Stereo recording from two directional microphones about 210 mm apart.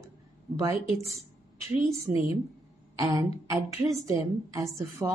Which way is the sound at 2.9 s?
20° right (ahead or behind).